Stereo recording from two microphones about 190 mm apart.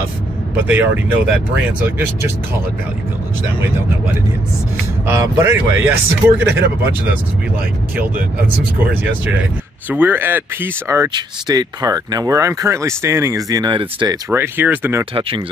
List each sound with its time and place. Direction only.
0.7 s speech: 10° right (ahead or behind)
5.0 s speech: 15° right (ahead or behind)
9.2 s speech: 10° right (ahead or behind); by 14.1 s 25° right (ahead or behind)
14.3 s speech: 10° right (ahead or behind)
15.1 s speech: 30° right (ahead or behind)